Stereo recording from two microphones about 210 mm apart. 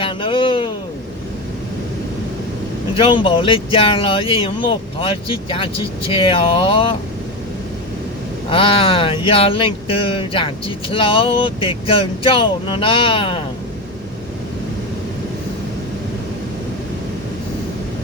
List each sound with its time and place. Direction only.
0.0 s a sound: 25° left (ahead or behind)
2.9 s speech: 25° left (ahead or behind)
8.4 s speech: 25° left (ahead or behind)